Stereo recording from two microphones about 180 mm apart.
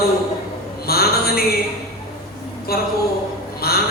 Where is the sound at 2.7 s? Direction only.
60° left (ahead or behind).